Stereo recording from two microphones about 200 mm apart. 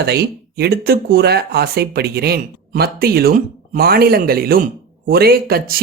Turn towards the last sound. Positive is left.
turn(degrees=-50)  # may be behind; listen again after turning